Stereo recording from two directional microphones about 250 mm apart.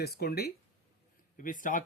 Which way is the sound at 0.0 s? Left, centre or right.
Left.